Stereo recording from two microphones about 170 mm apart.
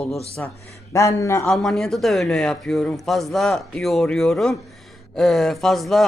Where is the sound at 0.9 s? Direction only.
20° left (ahead or behind).